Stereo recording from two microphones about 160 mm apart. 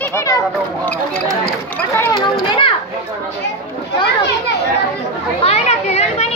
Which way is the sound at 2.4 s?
35° left (ahead or behind).